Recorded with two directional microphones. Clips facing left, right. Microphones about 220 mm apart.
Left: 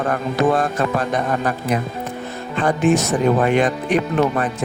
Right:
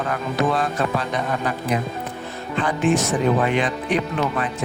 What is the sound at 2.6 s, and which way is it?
Speech, 45° left (ahead or behind).